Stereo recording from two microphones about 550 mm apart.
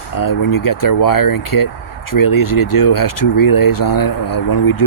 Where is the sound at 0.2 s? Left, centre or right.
Left.